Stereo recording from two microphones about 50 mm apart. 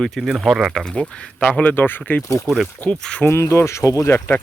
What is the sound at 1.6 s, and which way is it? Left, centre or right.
Speech, left.